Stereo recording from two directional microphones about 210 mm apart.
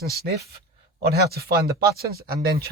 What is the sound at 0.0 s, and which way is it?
Speech, 45° right (ahead or behind).